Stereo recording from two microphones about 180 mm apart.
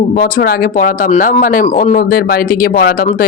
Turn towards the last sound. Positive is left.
turn(degrees=60)  # may be behind; listen again after turning